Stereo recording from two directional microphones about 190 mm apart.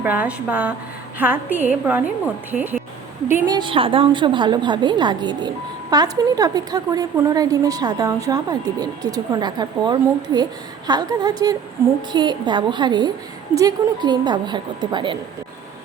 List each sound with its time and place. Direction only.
0.0 s a woman's voice: 10° right (ahead or behind); by 15.2 s 25° right (ahead or behind)